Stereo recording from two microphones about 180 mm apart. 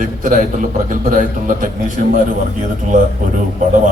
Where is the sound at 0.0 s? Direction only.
50° right (ahead or behind).